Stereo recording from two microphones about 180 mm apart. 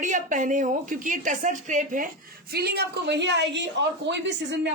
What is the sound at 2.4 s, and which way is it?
Speech, 60° right (ahead or behind).